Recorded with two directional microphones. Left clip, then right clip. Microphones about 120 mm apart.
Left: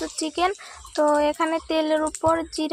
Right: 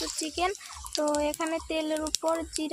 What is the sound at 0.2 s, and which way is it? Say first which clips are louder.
Speech: left 7 dB; 35° left (ahead or behind).